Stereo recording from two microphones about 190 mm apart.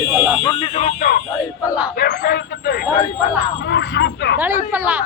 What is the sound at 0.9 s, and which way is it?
A man's voice, 50° left (ahead or behind).